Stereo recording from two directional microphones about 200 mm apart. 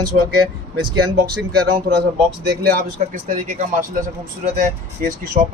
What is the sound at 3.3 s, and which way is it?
Speech, 40° right (ahead or behind).